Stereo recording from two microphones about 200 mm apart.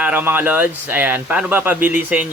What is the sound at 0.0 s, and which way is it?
Speech, 10° right (ahead or behind).